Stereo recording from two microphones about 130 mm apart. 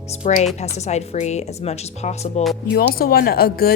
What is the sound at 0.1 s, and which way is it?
A woman's voice, 65° left (ahead or behind).